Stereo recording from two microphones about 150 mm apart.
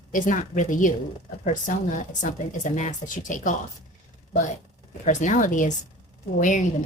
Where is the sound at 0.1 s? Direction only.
60° left (ahead or behind).